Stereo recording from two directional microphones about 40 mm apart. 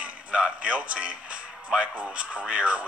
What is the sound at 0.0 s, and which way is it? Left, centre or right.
Speech, right.